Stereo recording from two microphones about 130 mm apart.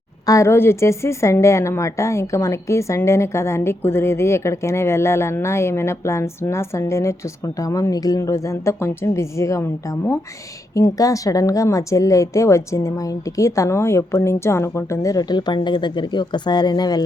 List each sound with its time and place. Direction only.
0.3 s a woman's voice: 20° left (ahead or behind)
10.8 s a woman's voice: 25° left (ahead or behind)